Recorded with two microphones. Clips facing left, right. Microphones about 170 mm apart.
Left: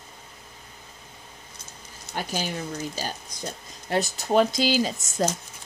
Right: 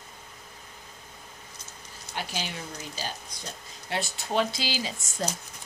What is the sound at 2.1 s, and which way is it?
Speech, 45° left (ahead or behind).